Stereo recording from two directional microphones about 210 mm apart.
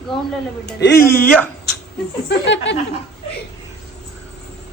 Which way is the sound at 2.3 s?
55° left (ahead or behind).